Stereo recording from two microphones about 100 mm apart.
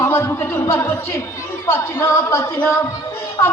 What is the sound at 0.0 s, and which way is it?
A man's voice, 25° left (ahead or behind).